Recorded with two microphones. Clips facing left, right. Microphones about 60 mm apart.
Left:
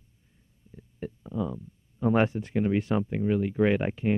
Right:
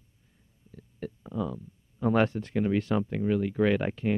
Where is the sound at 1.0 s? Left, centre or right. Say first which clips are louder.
Left 1 dB; centre.